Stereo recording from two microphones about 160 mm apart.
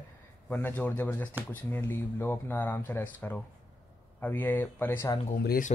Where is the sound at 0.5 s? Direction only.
10° left (ahead or behind).